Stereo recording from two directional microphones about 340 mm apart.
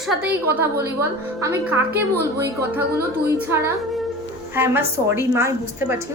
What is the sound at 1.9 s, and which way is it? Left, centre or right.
Speech, right.